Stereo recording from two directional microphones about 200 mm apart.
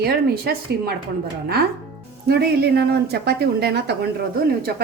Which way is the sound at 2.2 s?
50° right (ahead or behind).